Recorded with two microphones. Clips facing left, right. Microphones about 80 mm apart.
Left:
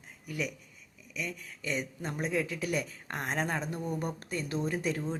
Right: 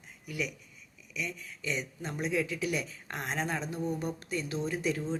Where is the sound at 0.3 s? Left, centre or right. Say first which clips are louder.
Even; left.